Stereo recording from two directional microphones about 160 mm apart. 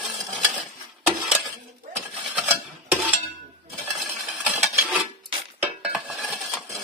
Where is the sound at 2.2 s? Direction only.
10° right (ahead or behind).